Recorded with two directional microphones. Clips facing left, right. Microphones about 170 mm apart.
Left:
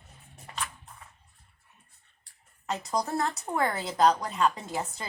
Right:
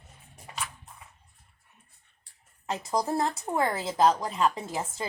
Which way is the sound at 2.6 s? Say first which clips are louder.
Right 1 dB; 25° right (ahead or behind).